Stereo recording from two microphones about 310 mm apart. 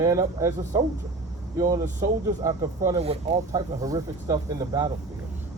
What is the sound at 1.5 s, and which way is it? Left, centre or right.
Speech, centre.